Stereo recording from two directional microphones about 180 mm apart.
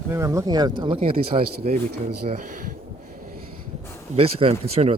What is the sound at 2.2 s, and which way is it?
Speech, 45° right (ahead or behind).